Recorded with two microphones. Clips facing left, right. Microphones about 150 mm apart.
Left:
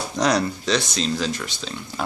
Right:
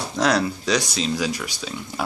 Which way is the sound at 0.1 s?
5° right (ahead or behind).